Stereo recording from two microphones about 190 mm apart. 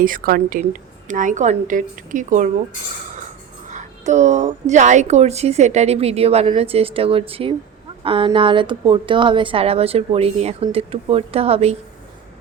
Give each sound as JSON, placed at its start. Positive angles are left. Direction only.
{"t": 0.0, "sound": "a woman's voice", "side_deg": -45}
{"t": 3.7, "sound": "a woman's voice", "side_deg": -40}